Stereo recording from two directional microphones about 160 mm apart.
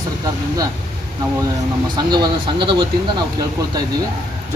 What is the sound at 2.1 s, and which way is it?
Speech, 30° right (ahead or behind).